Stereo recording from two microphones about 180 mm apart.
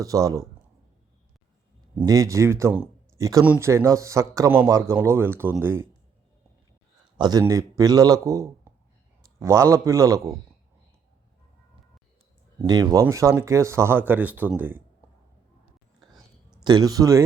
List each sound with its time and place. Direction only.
0.0 s speech: 20° right (ahead or behind)
2.0 s speech: 20° right (ahead or behind)
7.2 s speech: 20° right (ahead or behind)
12.5 s speech: 20° right (ahead or behind)
16.1 s a sound: 5° right (ahead or behind)
16.6 s speech: 20° right (ahead or behind)